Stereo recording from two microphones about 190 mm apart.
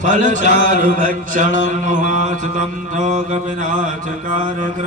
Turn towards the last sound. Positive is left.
turn(degrees=-40)  # may be behind; listen again after turning